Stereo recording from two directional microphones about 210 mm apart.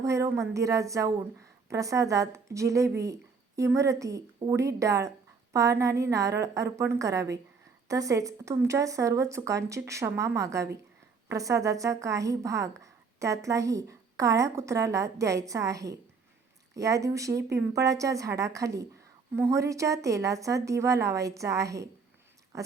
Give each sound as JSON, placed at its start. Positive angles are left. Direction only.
{"t": 0.0, "sound": "a woman's voice", "side_deg": -15}